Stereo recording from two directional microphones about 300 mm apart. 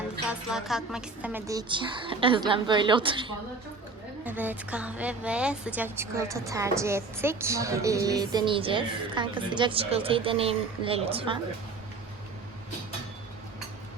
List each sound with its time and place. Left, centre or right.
0.3 s a woman's voice: centre
4.3 s a woman's voice: centre